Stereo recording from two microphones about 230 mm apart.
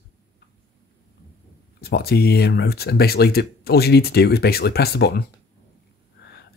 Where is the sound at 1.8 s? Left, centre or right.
Left.